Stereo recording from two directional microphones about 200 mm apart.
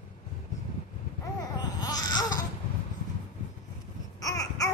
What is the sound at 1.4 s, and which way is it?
Babbling, 20° left (ahead or behind).